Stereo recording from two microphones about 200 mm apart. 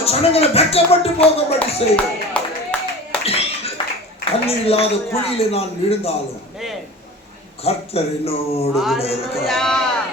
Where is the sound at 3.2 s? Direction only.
30° left (ahead or behind).